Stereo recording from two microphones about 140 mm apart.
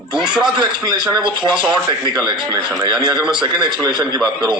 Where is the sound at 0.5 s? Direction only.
30° right (ahead or behind).